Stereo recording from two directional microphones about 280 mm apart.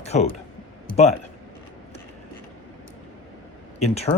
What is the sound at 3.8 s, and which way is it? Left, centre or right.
Speech, left.